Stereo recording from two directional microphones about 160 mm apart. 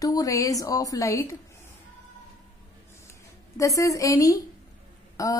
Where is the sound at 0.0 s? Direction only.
20° left (ahead or behind).